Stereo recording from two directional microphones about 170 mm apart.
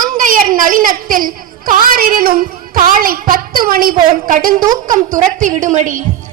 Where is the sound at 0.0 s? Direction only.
50° right (ahead or behind).